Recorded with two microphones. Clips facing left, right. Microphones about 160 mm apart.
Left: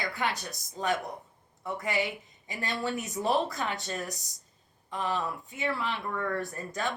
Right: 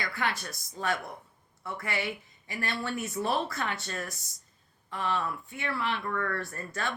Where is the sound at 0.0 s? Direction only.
15° left (ahead or behind).